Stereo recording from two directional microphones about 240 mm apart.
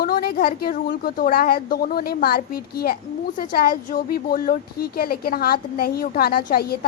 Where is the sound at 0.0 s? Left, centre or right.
Left.